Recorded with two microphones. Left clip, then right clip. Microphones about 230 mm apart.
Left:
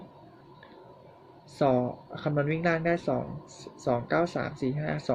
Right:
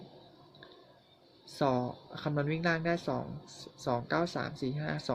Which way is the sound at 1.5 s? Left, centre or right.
Centre.